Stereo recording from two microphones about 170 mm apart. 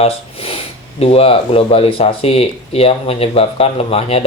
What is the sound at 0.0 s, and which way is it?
Speech, 35° left (ahead or behind).